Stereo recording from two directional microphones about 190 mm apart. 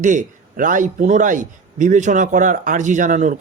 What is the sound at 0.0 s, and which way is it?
A man's voice, 40° right (ahead or behind).